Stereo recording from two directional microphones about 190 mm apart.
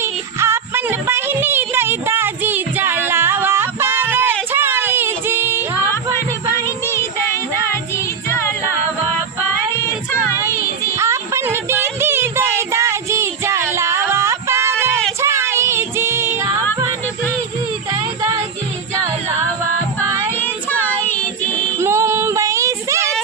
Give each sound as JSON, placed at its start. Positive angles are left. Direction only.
{"t": 0.0, "sound": "music", "side_deg": -15}
{"t": 4.5, "sound": "child singing", "side_deg": -10}
{"t": 6.7, "sound": "child singing", "side_deg": 15}
{"t": 7.6, "sound": "music", "side_deg": 15}
{"t": 9.0, "sound": "child singing", "side_deg": 15}
{"t": 10.9, "sound": "a sound", "side_deg": -15}
{"t": 15.2, "sound": "child singing", "side_deg": -15}
{"t": 20.3, "sound": "child singing", "side_deg": 10}
{"t": 21.8, "sound": "child singing", "side_deg": -15}